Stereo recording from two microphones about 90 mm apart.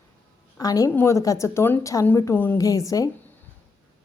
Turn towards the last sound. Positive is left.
turn(degrees=40)  # may be behind; listen again after turning